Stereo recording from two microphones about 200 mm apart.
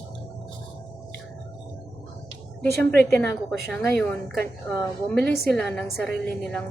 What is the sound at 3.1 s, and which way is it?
A woman's voice, 10° left (ahead or behind).